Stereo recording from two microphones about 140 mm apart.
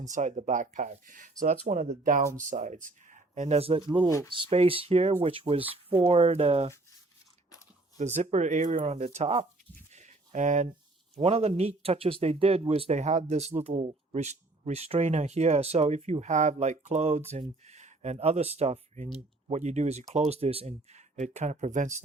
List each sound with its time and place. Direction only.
0.0 s speech: 60° right (ahead or behind)
7.9 s speech: 55° right (ahead or behind)
9.9 s a sound: 55° right (ahead or behind)
11.1 s speech: 45° right (ahead or behind)